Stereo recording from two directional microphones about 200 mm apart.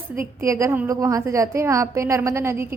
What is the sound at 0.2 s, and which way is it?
A woman's voice, 15° right (ahead or behind).